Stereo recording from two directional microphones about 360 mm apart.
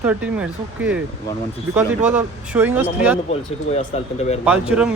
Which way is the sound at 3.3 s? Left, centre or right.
Centre.